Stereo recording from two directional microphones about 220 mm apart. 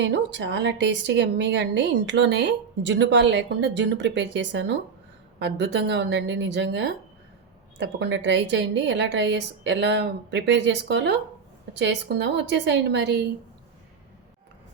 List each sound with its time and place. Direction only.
0.0 s a woman's voice: 55° right (ahead or behind)